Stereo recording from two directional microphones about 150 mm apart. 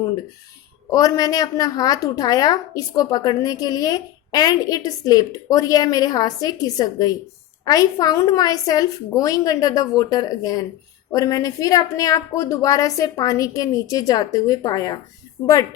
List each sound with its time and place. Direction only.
0.9 s a woman's voice: 25° left (ahead or behind)